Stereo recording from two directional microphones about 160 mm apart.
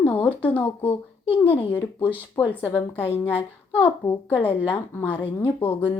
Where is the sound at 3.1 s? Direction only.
15° left (ahead or behind).